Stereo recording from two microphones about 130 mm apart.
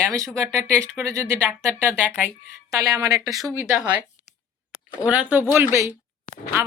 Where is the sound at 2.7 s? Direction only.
25° right (ahead or behind).